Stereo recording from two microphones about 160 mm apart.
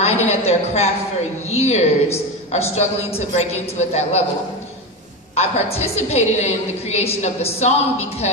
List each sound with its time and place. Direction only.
0.0 s a woman's voice: 40° left (ahead or behind)
5.3 s a woman's voice: 40° left (ahead or behind)